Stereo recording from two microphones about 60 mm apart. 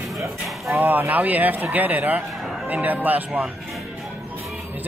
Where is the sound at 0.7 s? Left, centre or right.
Right.